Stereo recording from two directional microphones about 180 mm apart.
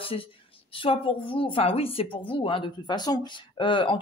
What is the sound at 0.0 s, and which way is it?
Speech, 30° left (ahead or behind).